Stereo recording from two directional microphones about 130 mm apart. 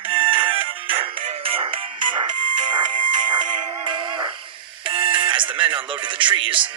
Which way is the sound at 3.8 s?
35° right (ahead or behind).